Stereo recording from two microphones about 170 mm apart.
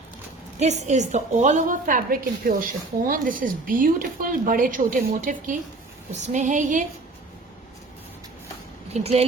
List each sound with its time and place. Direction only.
0.6 s a woman's voice: 40° right (ahead or behind)
8.9 s speech: 40° right (ahead or behind)